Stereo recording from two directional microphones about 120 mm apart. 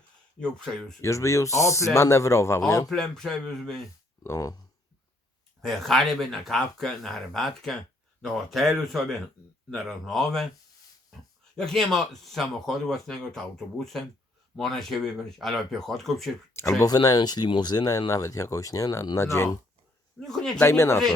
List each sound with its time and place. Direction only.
0.3 s speech: 5° left (ahead or behind)
1.0 s speech: 25° left (ahead or behind)
2.9 s speech: 5° left (ahead or behind)
4.2 s speech: 25° left (ahead or behind)
5.6 s speech: centre (ahead or behind)
11.5 s speech: 5° left (ahead or behind)
16.6 s speech: 25° left (ahead or behind)
20.1 s speech: 5° left (ahead or behind)
20.6 s speech: 20° left (ahead or behind)